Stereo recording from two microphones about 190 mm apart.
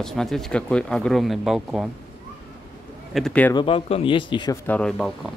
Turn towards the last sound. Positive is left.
turn(degrees=0)  # may be behind; listen again after turning